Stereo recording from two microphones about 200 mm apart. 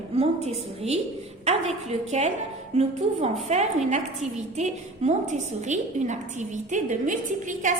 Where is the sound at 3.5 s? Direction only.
35° right (ahead or behind).